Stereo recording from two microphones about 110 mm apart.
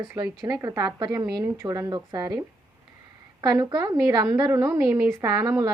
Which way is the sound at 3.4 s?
35° right (ahead or behind).